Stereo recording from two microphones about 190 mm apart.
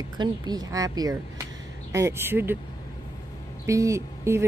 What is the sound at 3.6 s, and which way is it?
Speech, 15° right (ahead or behind).